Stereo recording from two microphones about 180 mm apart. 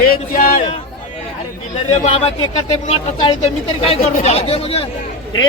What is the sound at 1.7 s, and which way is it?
A man's voice, 40° left (ahead or behind).